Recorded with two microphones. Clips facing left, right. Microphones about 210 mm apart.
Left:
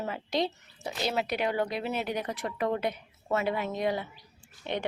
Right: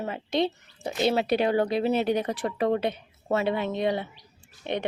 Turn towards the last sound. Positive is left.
turn(degrees=-20)  # may be behind; listen again after turning